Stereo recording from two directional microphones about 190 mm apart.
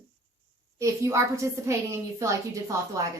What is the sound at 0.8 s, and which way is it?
A woman's voice, 15° right (ahead or behind).